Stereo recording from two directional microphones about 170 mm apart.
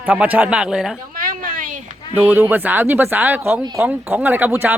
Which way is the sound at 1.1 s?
55° right (ahead or behind).